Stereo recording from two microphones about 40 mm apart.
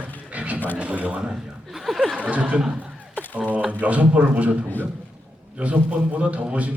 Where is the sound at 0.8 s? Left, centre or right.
Right.